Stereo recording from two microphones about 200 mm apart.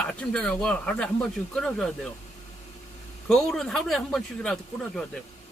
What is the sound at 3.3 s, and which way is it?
Speech, centre (ahead or behind).